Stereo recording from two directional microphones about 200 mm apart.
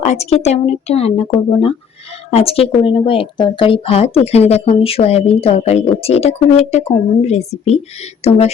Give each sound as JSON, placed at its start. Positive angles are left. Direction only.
{"t": 0.0, "sound": "a woman's voice", "side_deg": 30}